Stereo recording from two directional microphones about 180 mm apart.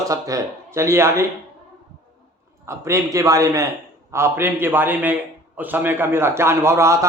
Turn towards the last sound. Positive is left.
turn(degrees=-15)  # may be behind; listen again after turning